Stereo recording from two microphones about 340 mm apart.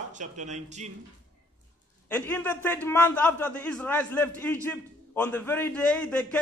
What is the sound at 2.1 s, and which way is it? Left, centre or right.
A man's voice, centre.